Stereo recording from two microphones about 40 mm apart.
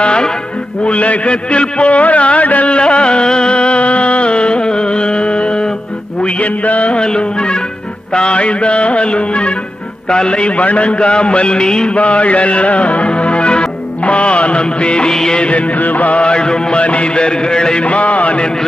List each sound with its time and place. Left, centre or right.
0.0 s music: left
0.9 s a sound: left
6.2 s music: left
7.0 s music: left
11.9 s music: left
15.1 s music of bollywood: centre
15.4 s music: left
16.2 s music: left
17.8 s music: left